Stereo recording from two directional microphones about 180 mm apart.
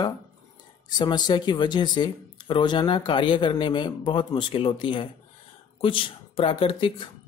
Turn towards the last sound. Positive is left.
turn(degrees=30)  # may be behind; listen again after turning